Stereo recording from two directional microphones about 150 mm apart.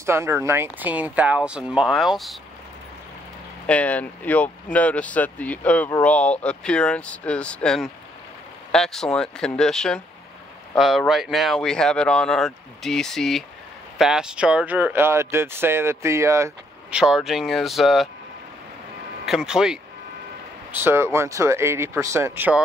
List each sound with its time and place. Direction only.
0.0 s speech: 20° right (ahead or behind); by 2.3 s centre (ahead or behind)
3.6 s speech: 10° left (ahead or behind); by 16.5 s 20° right (ahead or behind)
16.9 s speech: 5° right (ahead or behind)
19.2 s speech: 5° right (ahead or behind)
20.7 s speech: 15° right (ahead or behind)